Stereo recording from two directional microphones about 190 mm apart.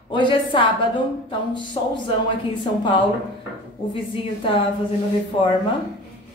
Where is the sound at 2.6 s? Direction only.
25° left (ahead or behind).